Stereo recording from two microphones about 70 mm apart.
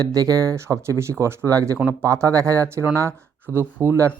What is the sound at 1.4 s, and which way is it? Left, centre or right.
Speech, right.